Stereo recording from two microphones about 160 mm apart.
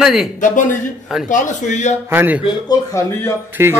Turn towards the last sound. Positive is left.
turn(degrees=-10)  # may be behind; listen again after turning